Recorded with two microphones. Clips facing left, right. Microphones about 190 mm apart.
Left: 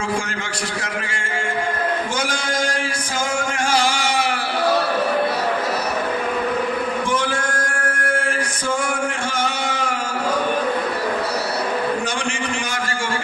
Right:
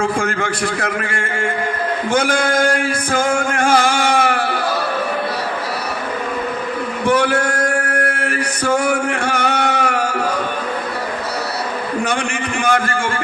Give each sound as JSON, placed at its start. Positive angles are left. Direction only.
{"t": 0.2, "sound": "a man's voice", "side_deg": -55}
{"t": 2.1, "sound": "a sound", "side_deg": -55}
{"t": 7.1, "sound": "male singing", "side_deg": -65}
{"t": 12.6, "sound": "a man's voice", "side_deg": -55}